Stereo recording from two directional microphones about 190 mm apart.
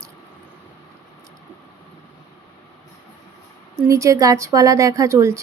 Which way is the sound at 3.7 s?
15° right (ahead or behind).